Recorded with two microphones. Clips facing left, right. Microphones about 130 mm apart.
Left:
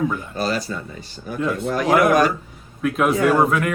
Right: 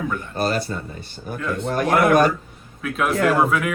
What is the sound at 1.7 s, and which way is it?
Speech, 55° right (ahead or behind).